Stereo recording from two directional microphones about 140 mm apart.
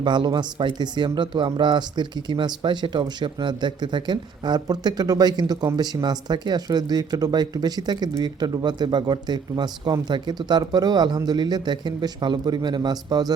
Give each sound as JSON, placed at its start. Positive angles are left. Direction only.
{"t": 0.0, "sound": "speech", "side_deg": -30}